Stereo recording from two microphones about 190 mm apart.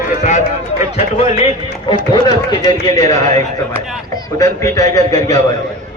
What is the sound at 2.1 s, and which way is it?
A man's voice, 20° left (ahead or behind).